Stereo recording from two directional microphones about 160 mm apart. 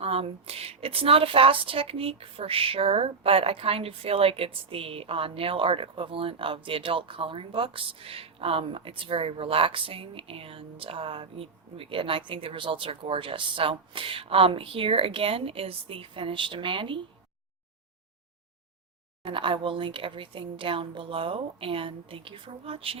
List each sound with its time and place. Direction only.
0.0 s a woman's voice: 40° right (ahead or behind)
19.2 s a woman's voice: 30° right (ahead or behind)